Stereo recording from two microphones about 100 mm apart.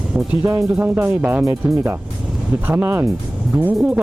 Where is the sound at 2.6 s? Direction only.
20° right (ahead or behind).